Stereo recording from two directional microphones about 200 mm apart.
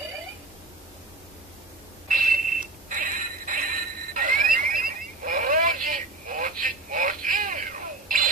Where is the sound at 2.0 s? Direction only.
45° right (ahead or behind).